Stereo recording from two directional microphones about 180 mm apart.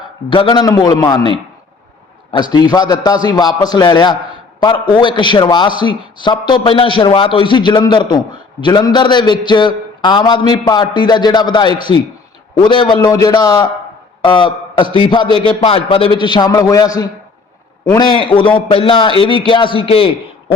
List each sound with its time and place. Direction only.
0.3 s a man's voice: 25° left (ahead or behind)
2.3 s a man's voice: 25° left (ahead or behind)